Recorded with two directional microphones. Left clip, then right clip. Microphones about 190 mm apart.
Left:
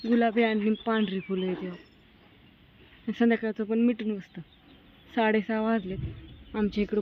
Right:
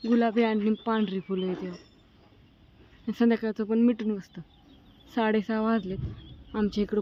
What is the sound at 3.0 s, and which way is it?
Speech, 10° right (ahead or behind).